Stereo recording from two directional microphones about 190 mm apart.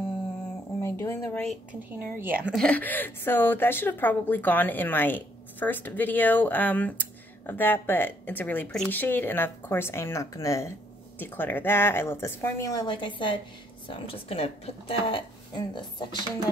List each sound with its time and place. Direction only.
0.7 s speech: 15° left (ahead or behind)
1.7 s a woman's voice: 45° right (ahead or behind)
2.1 s a woman's voice: 10° right (ahead or behind)
2.6 s a woman's voice: 10° left (ahead or behind); by 16.1 s 25° left (ahead or behind)